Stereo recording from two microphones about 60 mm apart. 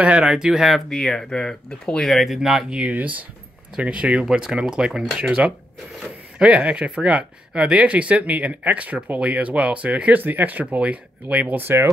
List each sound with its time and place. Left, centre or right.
0.0 s speech: centre
0.9 s speech: centre
2.7 s speech: right
6.3 s speech: centre
11.6 s speech: right